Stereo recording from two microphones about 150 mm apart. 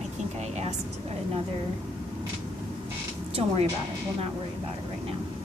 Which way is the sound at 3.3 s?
40° right (ahead or behind).